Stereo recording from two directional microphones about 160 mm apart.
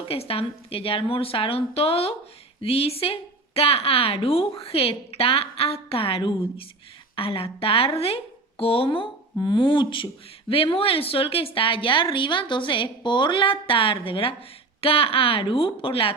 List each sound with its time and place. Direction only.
0.0 s a woman's voice: 35° left (ahead or behind)